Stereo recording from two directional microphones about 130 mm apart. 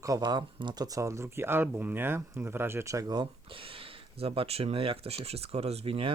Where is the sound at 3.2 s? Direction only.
45° right (ahead or behind).